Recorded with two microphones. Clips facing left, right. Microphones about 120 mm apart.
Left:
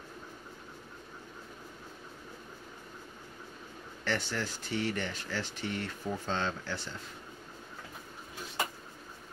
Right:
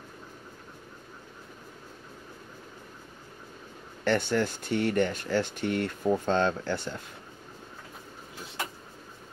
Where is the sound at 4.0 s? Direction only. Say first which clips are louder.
Right 9 dB; 55° right (ahead or behind).